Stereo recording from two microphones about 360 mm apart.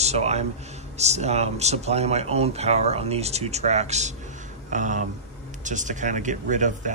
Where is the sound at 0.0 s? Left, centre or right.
Centre.